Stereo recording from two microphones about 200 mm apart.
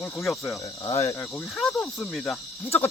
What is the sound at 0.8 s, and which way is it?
Speech, 20° left (ahead or behind).